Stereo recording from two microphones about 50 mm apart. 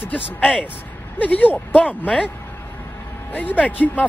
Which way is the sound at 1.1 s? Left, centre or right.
Left.